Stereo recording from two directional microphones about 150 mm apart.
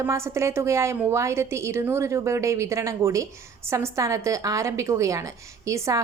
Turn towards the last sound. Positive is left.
turn(degrees=-20)  # may be behind; listen again after turning